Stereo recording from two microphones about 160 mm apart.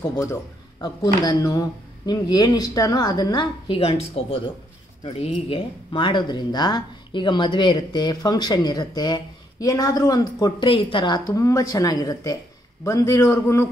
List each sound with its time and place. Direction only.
0.1 s a man's voice: 15° left (ahead or behind)